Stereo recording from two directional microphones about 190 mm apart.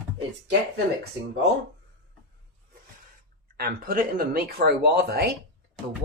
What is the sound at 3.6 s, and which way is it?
Speech, 50° right (ahead or behind).